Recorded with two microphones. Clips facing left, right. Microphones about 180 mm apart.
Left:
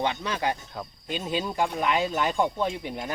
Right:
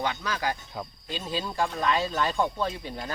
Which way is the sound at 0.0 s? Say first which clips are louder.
Left 2 dB; 25° left (ahead or behind).